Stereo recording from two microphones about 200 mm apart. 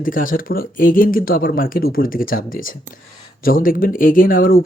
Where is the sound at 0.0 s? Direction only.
45° left (ahead or behind).